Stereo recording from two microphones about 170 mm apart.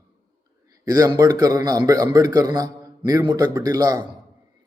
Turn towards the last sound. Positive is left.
turn(degrees=-20)  # may be behind; listen again after turning